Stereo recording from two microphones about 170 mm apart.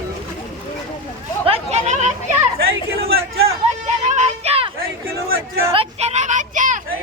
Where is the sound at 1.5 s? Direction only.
35° right (ahead or behind).